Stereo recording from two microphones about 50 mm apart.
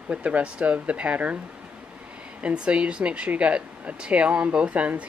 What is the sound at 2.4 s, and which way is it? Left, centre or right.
Speech, right.